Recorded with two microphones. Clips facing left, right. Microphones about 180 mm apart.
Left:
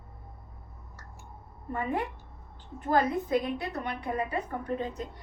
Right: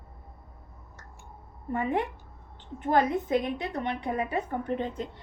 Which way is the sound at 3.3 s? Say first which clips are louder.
Right 1 dB; 20° right (ahead or behind).